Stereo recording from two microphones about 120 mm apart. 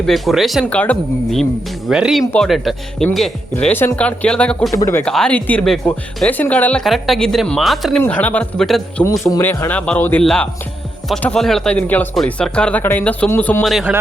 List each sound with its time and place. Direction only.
0.0 s a woman's voice: centre (ahead or behind)
0.6 s speech: 10° left (ahead or behind)
1.9 s a woman's voice: 5° right (ahead or behind)
3.6 s speech: 15° left (ahead or behind)
4.7 s speech: 25° left (ahead or behind)
5.0 s speech: 5° left (ahead or behind)
6.8 s a woman's voice: centre (ahead or behind)
8.0 s speech: 15° left (ahead or behind)
9.4 s speech: 15° left (ahead or behind)
13.7 s a woman's voice: centre (ahead or behind)